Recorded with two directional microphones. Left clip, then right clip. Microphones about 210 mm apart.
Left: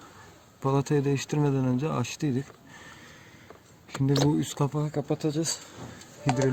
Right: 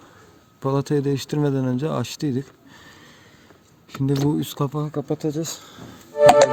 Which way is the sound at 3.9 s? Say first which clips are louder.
Right 3 dB; 20° right (ahead or behind).